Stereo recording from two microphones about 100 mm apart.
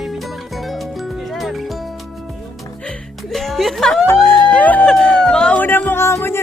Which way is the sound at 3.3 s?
Centre (ahead or behind).